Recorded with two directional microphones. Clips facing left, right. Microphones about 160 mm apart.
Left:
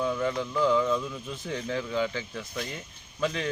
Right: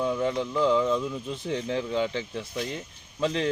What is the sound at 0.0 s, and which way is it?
Speech, 25° right (ahead or behind).